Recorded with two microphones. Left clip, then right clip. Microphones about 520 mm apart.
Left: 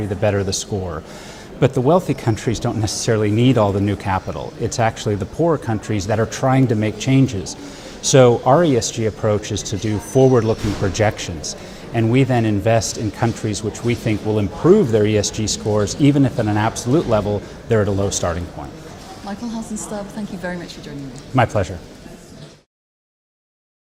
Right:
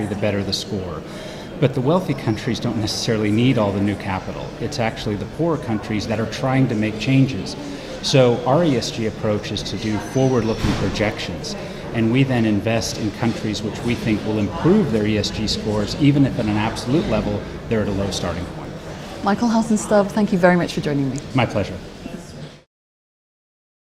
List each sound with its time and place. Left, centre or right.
0.2 s speech: left
19.2 s a woman's voice: right
21.3 s speech: left